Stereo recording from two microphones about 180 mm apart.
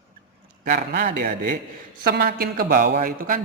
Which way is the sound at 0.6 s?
55° right (ahead or behind).